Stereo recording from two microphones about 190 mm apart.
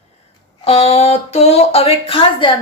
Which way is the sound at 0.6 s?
30° left (ahead or behind).